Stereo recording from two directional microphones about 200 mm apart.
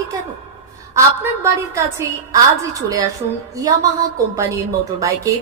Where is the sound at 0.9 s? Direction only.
15° right (ahead or behind).